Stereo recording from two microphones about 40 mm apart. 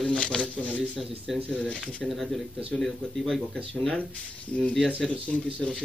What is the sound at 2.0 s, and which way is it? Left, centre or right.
Speech, centre.